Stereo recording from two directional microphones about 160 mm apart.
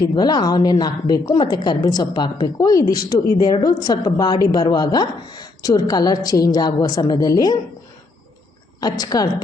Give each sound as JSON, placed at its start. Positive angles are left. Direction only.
{"t": 0.0, "sound": "a woman's voice", "side_deg": 25}
{"t": 8.8, "sound": "a woman's voice", "side_deg": 25}